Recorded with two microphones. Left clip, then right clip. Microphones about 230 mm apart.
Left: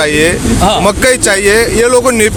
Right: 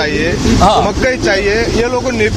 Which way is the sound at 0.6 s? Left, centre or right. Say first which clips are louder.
Right 2 dB; centre.